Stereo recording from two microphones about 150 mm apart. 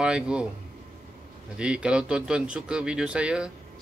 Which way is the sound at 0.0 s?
5° right (ahead or behind).